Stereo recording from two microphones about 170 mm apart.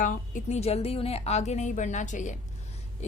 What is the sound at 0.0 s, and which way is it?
A woman's voice, 50° left (ahead or behind).